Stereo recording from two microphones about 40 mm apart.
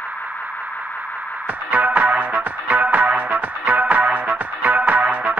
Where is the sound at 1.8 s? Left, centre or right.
Right.